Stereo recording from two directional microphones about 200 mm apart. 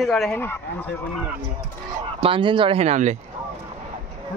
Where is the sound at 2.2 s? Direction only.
25° right (ahead or behind).